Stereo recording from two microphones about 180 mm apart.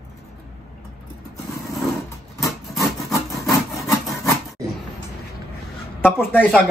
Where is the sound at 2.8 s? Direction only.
Centre (ahead or behind).